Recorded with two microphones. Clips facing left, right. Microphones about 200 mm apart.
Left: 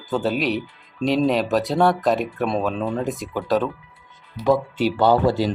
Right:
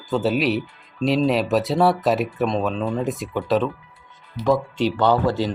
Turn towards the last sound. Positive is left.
turn(degrees=10)  # may be behind; listen again after turning